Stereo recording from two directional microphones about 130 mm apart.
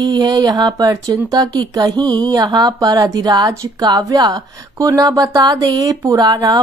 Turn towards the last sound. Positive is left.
turn(degrees=-30)  # may be behind; listen again after turning